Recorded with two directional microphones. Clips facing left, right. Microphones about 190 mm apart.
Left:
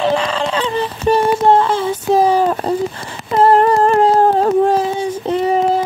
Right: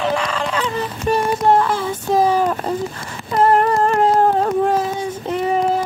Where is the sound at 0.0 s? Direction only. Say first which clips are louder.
Left 4 dB; 30° left (ahead or behind).